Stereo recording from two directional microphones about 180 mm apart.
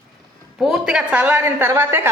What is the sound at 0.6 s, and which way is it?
A woman's voice, centre (ahead or behind).